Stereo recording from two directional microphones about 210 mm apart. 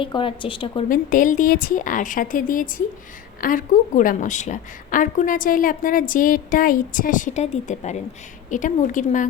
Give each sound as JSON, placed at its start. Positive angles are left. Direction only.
{"t": 0.0, "sound": "speech", "side_deg": 25}
{"t": 0.9, "sound": "a woman's voice", "side_deg": 40}